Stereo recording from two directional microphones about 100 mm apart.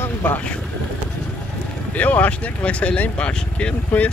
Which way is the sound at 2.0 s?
15° left (ahead or behind).